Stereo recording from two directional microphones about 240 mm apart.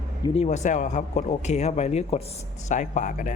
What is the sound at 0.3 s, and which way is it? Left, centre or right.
Speech, left.